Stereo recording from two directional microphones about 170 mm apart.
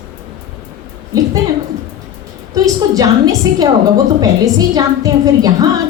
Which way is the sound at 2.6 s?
20° right (ahead or behind).